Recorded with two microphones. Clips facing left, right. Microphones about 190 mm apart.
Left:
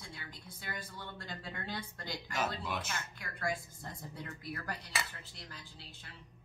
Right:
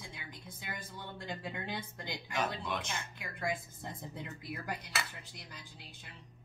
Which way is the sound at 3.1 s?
15° right (ahead or behind).